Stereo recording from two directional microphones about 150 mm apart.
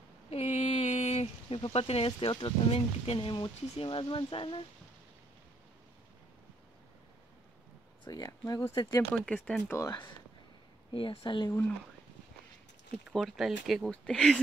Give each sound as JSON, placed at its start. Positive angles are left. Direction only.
{"t": 0.3, "sound": "speech", "side_deg": 45}
{"t": 8.0, "sound": "speech", "side_deg": 25}
{"t": 9.1, "sound": "speech", "side_deg": 5}
{"t": 9.7, "sound": "speech", "side_deg": 20}
{"t": 10.9, "sound": "speech", "side_deg": 35}
{"t": 12.9, "sound": "speech", "side_deg": 0}